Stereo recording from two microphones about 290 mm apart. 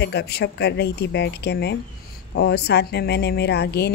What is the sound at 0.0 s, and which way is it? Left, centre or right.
Speech, left.